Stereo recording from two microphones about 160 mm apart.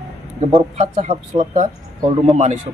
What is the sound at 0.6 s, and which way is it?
Speech, 50° right (ahead or behind).